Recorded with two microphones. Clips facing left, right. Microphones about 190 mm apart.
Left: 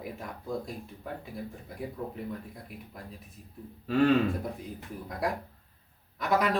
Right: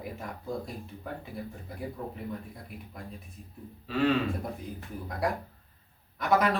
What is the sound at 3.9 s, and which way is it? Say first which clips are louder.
Speech: left 3 dB; 45° left (ahead or behind).